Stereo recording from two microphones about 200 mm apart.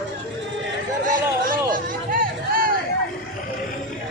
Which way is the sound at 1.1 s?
45° right (ahead or behind).